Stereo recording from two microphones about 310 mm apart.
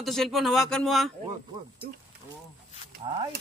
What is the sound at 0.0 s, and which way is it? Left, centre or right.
Speech, centre.